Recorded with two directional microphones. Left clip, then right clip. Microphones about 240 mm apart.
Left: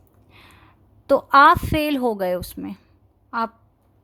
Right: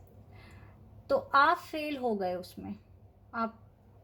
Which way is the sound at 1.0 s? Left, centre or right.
Left.